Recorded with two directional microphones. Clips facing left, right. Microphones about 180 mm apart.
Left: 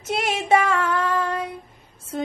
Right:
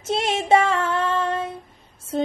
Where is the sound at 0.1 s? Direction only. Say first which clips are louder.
Right 2 dB; 25° right (ahead or behind).